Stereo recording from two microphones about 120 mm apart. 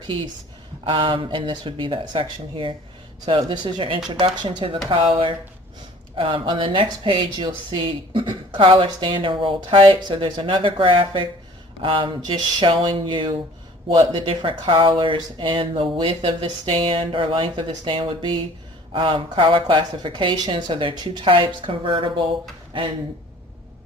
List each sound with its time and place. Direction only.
0.9 s speech: 45° right (ahead or behind)